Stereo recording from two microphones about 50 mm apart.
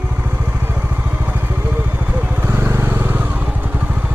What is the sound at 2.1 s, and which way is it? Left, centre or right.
Vehicle, right.